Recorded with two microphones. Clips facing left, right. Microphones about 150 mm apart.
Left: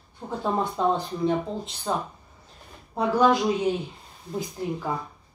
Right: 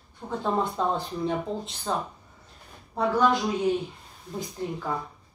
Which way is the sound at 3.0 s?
20° left (ahead or behind).